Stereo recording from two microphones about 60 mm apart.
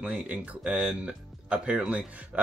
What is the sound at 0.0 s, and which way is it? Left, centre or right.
Speech, right.